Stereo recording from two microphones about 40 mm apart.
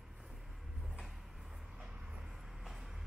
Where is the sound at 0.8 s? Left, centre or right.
Centre.